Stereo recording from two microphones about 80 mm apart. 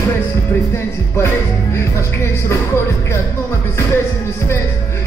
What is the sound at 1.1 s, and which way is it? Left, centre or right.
Music, left.